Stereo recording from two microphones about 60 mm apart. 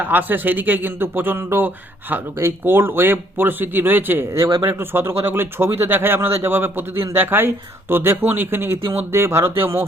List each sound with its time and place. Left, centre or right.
0.0 s speech: right